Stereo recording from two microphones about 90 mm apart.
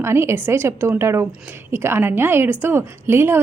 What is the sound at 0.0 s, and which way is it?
A woman's voice, 30° right (ahead or behind).